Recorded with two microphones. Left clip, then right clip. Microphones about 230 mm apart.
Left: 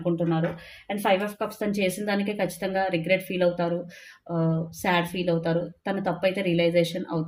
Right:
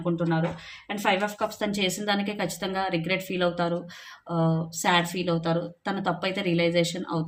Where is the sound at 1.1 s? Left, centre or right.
Centre.